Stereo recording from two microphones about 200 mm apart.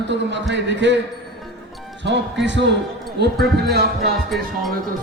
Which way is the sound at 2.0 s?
60° right (ahead or behind).